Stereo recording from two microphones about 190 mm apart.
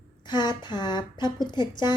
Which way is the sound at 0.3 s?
25° left (ahead or behind).